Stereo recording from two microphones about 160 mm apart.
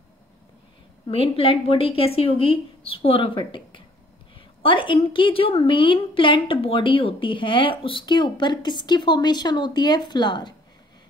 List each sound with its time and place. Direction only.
1.0 s a woman's voice: 35° left (ahead or behind)